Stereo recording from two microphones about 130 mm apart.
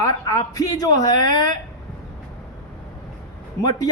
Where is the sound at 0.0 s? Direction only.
25° left (ahead or behind).